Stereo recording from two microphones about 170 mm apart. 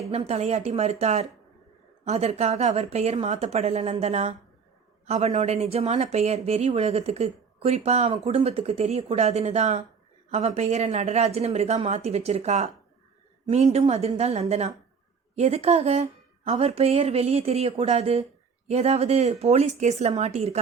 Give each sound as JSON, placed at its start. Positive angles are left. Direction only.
{"t": 0.3, "sound": "speech", "side_deg": -40}